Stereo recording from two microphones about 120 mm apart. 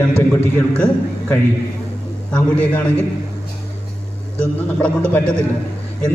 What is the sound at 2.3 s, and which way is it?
Speech, 10° left (ahead or behind).